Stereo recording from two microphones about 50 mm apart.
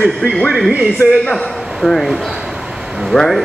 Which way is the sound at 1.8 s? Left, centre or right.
Centre.